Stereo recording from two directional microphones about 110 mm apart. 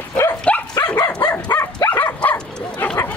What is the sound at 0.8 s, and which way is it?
Dog, 35° left (ahead or behind).